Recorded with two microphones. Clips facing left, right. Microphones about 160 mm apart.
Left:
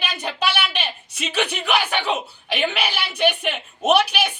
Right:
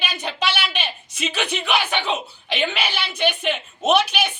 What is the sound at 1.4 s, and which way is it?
A woman's voice, 10° left (ahead or behind).